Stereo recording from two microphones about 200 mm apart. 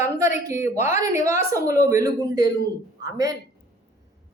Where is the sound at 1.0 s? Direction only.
15° right (ahead or behind).